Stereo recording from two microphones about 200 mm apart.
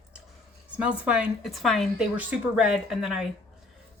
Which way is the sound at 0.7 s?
5° right (ahead or behind).